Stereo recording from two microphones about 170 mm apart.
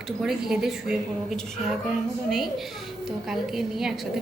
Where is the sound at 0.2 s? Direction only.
5° right (ahead or behind).